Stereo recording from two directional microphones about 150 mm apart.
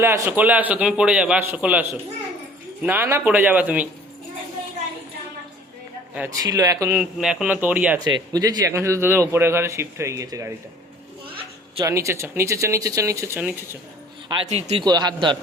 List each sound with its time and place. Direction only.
0.0 s a man's voice: 15° right (ahead or behind)
6.4 s a man's voice: 25° right (ahead or behind)
6.9 s a man's voice: 5° right (ahead or behind)
7.9 s a man's voice: 25° right (ahead or behind)
11.8 s a man's voice: 20° right (ahead or behind)
14.4 s a man's voice: 45° right (ahead or behind)
14.8 s a man's voice: 30° right (ahead or behind)